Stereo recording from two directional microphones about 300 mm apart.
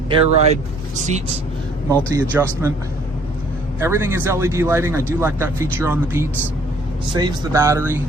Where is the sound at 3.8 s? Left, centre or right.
Centre.